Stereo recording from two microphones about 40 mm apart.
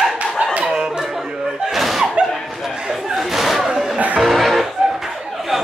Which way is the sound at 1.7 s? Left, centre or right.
Centre.